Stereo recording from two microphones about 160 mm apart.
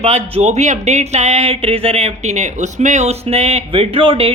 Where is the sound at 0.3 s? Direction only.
45° right (ahead or behind).